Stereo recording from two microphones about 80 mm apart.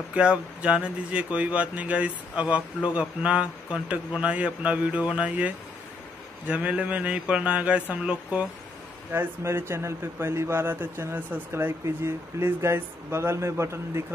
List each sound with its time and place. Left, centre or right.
0.1 s speech: centre
9.1 s speech: right